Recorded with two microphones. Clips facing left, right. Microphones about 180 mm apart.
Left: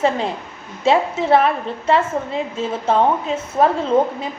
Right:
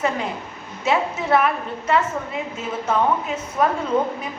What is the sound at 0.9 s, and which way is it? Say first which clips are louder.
A woman's voice: left 5 dB; 30° left (ahead or behind).